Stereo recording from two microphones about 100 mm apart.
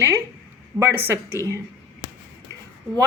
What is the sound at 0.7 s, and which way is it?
Speech, 5° right (ahead or behind).